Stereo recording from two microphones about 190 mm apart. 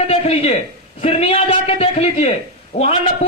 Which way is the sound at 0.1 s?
30° left (ahead or behind).